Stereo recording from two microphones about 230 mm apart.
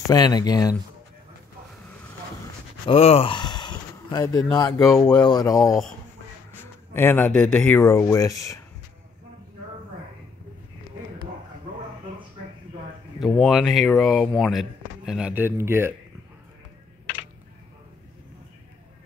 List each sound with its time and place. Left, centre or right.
0.1 s speech: centre
2.9 s speech: left
4.9 s speech: centre
5.2 s speech: centre
6.9 s speech: centre
13.2 s speech: centre